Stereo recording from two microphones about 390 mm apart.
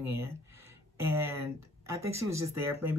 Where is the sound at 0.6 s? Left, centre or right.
Centre.